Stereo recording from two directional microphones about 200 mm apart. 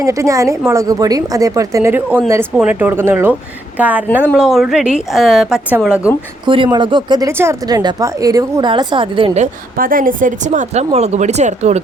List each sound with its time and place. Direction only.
0.0 s a woman's voice: 15° right (ahead or behind)
6.4 s speech: 25° right (ahead or behind)
9.7 s speech: 45° right (ahead or behind)